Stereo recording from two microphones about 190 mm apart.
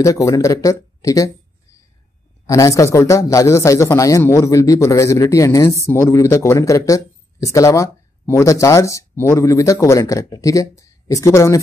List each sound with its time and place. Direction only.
0.0 s a man's voice: 15° left (ahead or behind)
2.4 s a man's voice: 15° left (ahead or behind)